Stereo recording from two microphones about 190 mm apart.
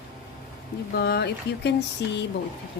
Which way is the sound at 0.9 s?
60° left (ahead or behind).